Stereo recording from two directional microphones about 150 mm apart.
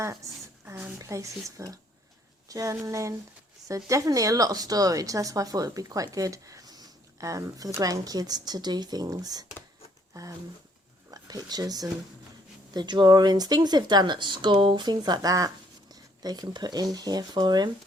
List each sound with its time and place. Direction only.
0.0 s a sound: 20° right (ahead or behind)
0.9 s a woman's voice: 20° right (ahead or behind)
11.1 s a woman's voice: 25° right (ahead or behind)